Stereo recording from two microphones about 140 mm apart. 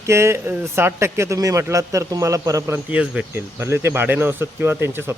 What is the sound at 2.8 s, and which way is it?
Speech, 10° right (ahead or behind).